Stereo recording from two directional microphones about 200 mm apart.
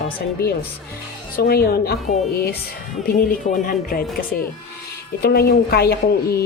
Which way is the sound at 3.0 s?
50° left (ahead or behind).